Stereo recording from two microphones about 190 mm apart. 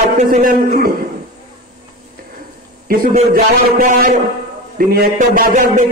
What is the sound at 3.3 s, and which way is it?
A man's voice, 50° right (ahead or behind).